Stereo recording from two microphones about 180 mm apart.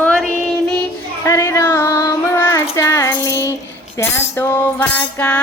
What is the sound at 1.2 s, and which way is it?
Child singing, 15° left (ahead or behind).